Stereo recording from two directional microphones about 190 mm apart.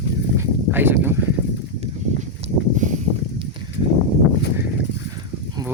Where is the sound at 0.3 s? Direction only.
10° right (ahead or behind).